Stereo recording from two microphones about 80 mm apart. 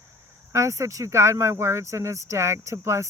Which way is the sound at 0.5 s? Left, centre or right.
Right.